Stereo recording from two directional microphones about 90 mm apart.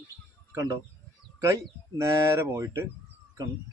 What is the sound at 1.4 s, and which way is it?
Speech, 30° right (ahead or behind).